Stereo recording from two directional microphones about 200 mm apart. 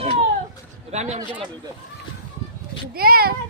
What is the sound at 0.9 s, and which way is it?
Speech, 35° right (ahead or behind).